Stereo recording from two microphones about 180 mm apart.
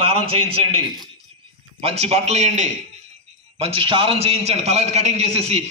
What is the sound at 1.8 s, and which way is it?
A man's voice, 35° right (ahead or behind).